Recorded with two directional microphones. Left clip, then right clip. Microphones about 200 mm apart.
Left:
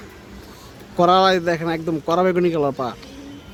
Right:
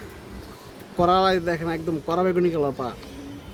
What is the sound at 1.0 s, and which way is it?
Speech, 40° left (ahead or behind).